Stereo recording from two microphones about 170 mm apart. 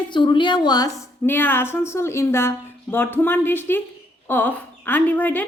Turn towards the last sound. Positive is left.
turn(degrees=10)  # may be behind; listen again after turning